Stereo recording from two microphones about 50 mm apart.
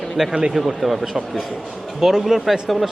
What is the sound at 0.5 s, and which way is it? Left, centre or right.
Speech, centre.